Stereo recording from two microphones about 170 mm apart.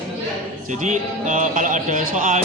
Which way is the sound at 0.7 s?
45° right (ahead or behind).